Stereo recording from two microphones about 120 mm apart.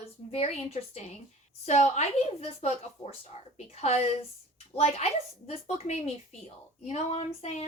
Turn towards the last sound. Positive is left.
turn(degrees=60)  # may be behind; listen again after turning